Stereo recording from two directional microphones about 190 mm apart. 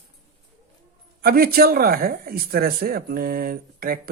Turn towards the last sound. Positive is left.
turn(degrees=-50)  # may be behind; listen again after turning